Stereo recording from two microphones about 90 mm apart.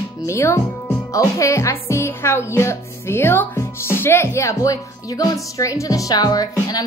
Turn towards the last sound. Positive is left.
turn(degrees=45)  # may be behind; listen again after turning